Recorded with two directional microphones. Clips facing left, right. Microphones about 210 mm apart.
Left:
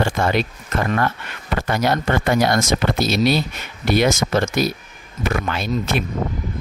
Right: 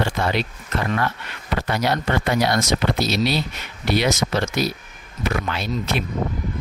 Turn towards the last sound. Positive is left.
turn(degrees=50)  # may be behind; listen again after turning